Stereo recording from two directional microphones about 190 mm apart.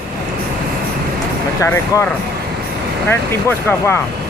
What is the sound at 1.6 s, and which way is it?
Speech, 15° left (ahead or behind).